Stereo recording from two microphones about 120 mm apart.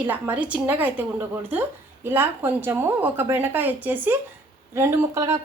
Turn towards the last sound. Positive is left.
turn(degrees=-25)  # may be behind; listen again after turning